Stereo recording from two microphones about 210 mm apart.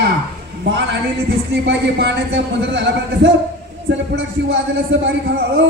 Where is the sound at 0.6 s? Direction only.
55° right (ahead or behind).